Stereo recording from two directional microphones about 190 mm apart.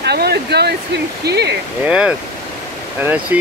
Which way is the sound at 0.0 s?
60° right (ahead or behind).